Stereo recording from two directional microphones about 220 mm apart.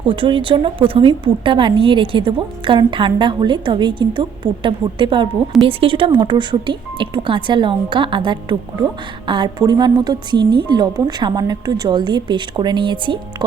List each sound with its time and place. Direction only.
0.0 s a woman's voice: 20° right (ahead or behind)